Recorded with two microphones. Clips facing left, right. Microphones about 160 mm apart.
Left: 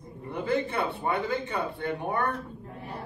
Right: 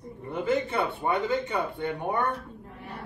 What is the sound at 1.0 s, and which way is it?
Speech, 20° right (ahead or behind).